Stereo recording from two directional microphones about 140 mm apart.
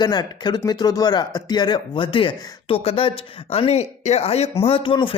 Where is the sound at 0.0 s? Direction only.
30° left (ahead or behind).